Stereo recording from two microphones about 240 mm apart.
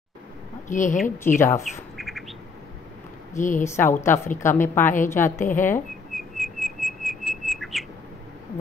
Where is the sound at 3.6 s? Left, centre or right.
Centre.